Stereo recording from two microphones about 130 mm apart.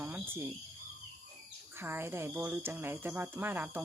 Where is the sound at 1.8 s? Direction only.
20° right (ahead or behind).